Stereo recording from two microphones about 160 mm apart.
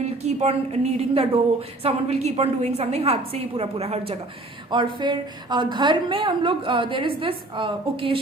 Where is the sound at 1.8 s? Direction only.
40° right (ahead or behind).